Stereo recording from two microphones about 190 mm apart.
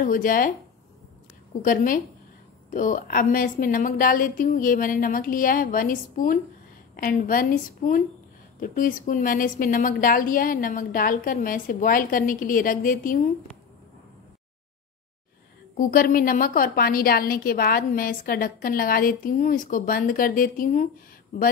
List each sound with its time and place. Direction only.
0.0 s a woman's voice: 45° left (ahead or behind)
1.6 s a woman's voice: 45° left (ahead or behind)
15.9 s a woman's voice: 50° left (ahead or behind)